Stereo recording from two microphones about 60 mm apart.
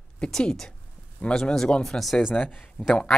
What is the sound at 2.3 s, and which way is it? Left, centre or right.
Speech, left.